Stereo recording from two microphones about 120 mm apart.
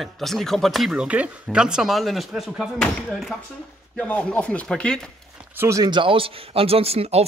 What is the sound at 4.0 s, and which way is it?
Speech, 10° left (ahead or behind).